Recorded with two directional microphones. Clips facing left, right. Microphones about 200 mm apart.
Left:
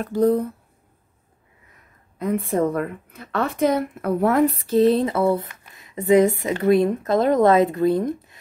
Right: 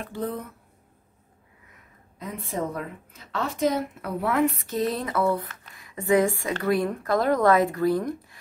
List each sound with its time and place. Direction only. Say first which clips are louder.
0.0 s speech: left 12 dB; 40° left (ahead or behind)
2.1 s a woman's voice: left 10 dB; 55° left (ahead or behind); by 8.4 s 20° left (ahead or behind)